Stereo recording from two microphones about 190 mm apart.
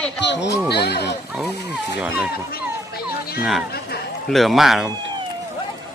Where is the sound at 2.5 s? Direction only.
55° left (ahead or behind).